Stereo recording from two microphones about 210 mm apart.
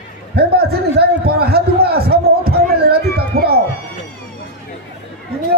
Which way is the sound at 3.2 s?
50° right (ahead or behind).